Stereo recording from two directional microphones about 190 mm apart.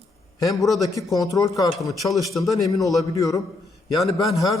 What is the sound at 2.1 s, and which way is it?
Speech, centre (ahead or behind).